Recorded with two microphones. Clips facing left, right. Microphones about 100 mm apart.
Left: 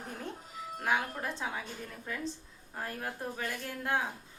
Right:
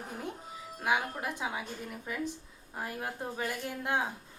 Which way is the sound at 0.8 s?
10° right (ahead or behind).